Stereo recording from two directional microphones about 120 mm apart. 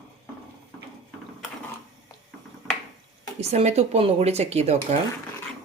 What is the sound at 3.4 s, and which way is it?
Speech, 60° right (ahead or behind).